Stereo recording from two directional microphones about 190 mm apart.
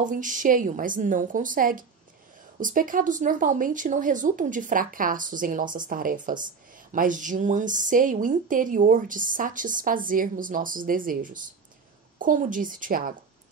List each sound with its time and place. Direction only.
0.0 s a woman's voice: 40° right (ahead or behind)